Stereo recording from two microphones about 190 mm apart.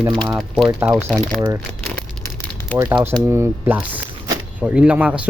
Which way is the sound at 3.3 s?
10° right (ahead or behind).